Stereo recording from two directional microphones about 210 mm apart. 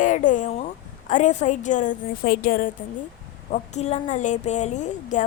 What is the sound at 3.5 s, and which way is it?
A woman's voice, 30° left (ahead or behind).